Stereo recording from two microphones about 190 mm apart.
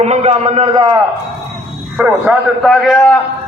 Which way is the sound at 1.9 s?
5° right (ahead or behind).